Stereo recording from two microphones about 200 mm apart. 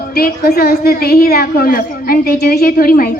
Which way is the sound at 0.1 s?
50° left (ahead or behind).